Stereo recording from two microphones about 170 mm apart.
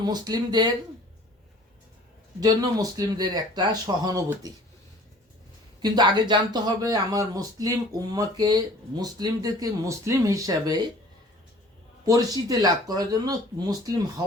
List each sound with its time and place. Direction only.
0.0 s speech: 25° right (ahead or behind)
2.4 s speech: 25° right (ahead or behind)
5.8 s speech: 25° right (ahead or behind)
12.0 s speech: 20° right (ahead or behind)